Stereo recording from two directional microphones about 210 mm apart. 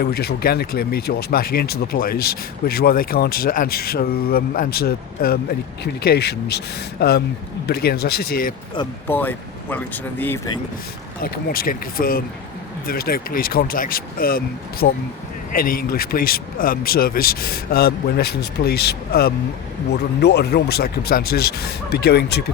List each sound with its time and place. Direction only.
0.0 s speech: 50° left (ahead or behind)
9.0 s speech: 10° left (ahead or behind)
11.2 s speech: 45° left (ahead or behind)